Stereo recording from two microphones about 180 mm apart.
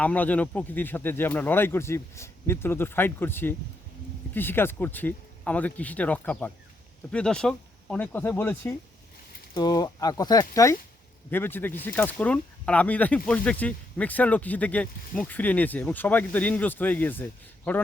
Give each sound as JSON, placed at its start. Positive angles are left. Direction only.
{"t": 0.0, "sound": "speech", "side_deg": 10}